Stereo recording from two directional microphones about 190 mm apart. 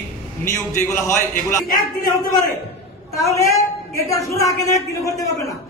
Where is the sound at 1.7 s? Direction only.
50° left (ahead or behind).